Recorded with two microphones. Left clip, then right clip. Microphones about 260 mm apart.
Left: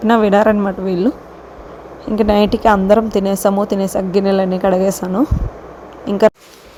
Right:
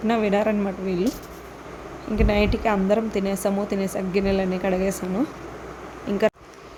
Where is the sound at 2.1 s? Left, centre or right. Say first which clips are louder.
Left 9 dB; left.